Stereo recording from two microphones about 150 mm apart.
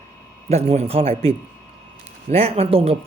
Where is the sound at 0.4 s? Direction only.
45° right (ahead or behind).